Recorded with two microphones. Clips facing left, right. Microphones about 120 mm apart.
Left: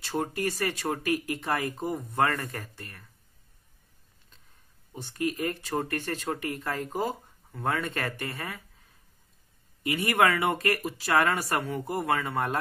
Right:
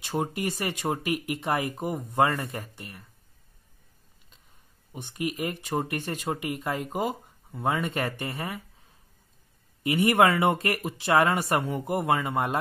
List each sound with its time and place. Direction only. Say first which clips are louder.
0.0 s speech: right 1 dB; 15° right (ahead or behind)
4.9 s speech: left 1 dB; 15° right (ahead or behind)